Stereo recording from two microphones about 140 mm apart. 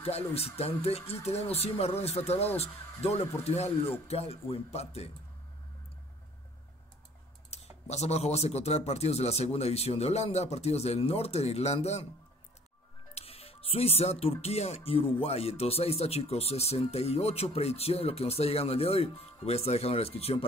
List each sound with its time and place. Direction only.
0.0 s speech: 45° left (ahead or behind)
7.9 s speech: 50° left (ahead or behind)
13.1 s speech: 45° left (ahead or behind)